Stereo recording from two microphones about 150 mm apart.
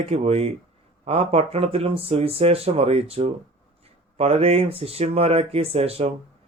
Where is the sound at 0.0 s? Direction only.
40° right (ahead or behind).